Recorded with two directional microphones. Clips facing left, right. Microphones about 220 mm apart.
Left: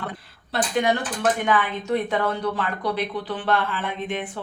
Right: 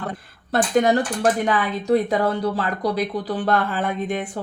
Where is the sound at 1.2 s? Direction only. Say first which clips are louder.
Right 2 dB; 35° right (ahead or behind).